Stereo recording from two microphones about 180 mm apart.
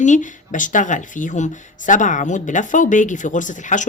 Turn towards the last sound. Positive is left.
turn(degrees=45)  # may be behind; listen again after turning